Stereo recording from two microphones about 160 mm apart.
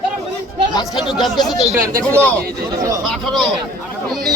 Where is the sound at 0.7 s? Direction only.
25° left (ahead or behind).